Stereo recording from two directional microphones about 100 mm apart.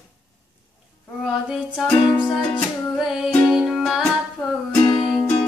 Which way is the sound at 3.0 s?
5° right (ahead or behind).